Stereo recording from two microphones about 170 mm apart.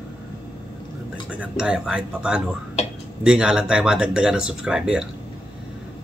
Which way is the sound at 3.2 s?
5° right (ahead or behind).